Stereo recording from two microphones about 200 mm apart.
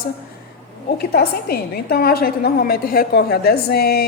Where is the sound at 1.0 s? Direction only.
50° left (ahead or behind).